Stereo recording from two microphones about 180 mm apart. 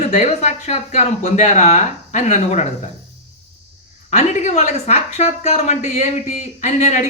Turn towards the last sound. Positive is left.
turn(degrees=40)  # may be behind; listen again after turning